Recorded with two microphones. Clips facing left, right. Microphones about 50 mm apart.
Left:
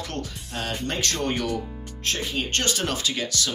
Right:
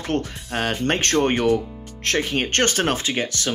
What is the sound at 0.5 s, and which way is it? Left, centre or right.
Speech, right.